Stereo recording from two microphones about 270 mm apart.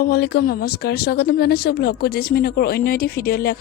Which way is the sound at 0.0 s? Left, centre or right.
Left.